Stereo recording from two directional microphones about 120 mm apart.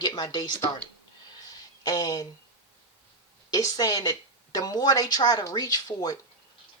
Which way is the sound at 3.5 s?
30° left (ahead or behind).